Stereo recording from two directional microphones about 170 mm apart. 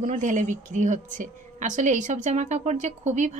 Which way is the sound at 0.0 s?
50° right (ahead or behind).